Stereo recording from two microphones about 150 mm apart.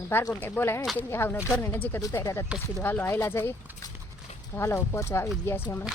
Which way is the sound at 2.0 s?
20° left (ahead or behind).